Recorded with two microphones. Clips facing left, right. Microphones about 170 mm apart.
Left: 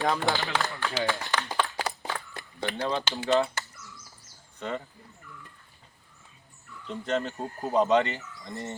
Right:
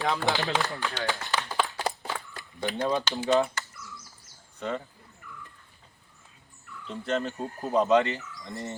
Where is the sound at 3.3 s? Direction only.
20° right (ahead or behind).